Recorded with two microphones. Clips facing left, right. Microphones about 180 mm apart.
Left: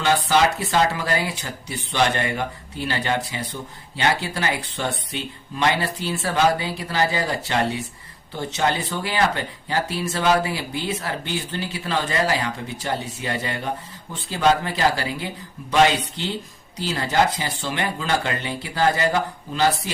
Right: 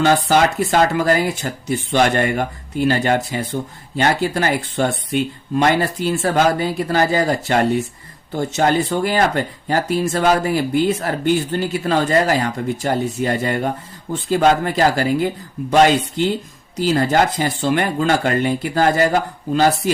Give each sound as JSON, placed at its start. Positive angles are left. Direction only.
{"t": 0.0, "sound": "speech", "side_deg": -45}